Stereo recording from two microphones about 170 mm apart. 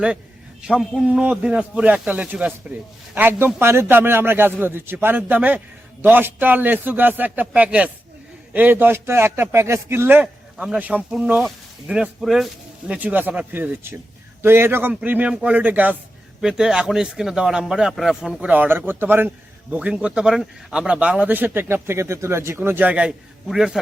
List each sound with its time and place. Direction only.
0.7 s speech: 5° right (ahead or behind)